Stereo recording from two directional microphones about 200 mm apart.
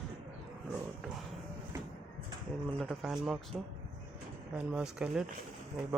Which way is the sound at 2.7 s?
Centre (ahead or behind).